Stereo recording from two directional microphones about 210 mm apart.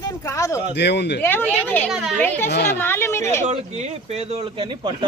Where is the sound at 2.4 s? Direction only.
55° left (ahead or behind).